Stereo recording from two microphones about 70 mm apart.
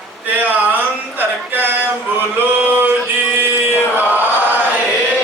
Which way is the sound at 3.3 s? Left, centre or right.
Right.